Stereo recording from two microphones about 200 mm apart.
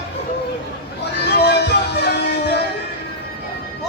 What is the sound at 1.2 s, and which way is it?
Music, 60° left (ahead or behind).